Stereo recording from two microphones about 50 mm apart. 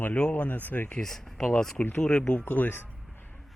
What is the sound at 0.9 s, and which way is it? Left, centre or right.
Speech, centre.